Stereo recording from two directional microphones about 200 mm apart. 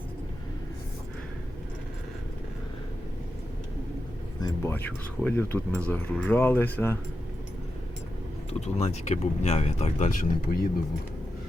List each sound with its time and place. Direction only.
4.4 s speech: 15° left (ahead or behind)
8.6 s speech: 35° left (ahead or behind)